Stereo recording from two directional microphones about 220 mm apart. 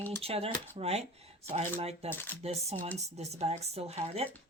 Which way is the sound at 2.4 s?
30° right (ahead or behind).